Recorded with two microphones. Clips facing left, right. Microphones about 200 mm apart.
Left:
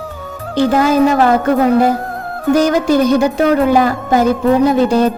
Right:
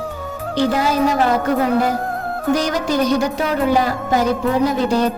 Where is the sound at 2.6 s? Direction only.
55° left (ahead or behind).